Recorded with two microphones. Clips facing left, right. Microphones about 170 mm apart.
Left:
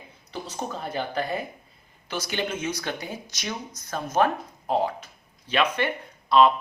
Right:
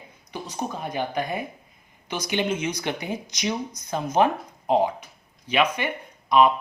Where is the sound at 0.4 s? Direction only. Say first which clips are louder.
Right 2 dB; 15° right (ahead or behind).